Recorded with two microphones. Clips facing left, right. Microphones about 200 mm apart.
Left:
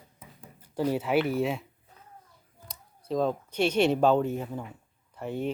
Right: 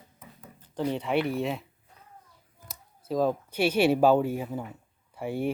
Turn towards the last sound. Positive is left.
turn(degrees=-10)  # may be behind; listen again after turning